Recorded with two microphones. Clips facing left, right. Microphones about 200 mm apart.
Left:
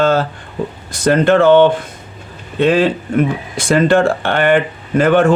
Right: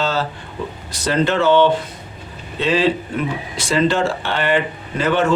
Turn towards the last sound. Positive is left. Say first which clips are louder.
# left 7 dB
turn(degrees=50)  # may be behind; listen again after turning